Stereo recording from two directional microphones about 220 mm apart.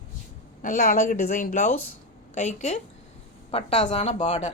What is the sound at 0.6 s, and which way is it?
A woman's voice, 40° left (ahead or behind).